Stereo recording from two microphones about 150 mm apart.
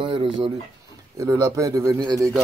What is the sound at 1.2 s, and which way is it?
Speech, 20° right (ahead or behind).